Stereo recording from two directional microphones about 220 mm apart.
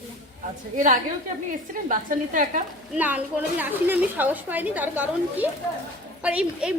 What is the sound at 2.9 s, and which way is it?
A woman's voice, 5° right (ahead or behind).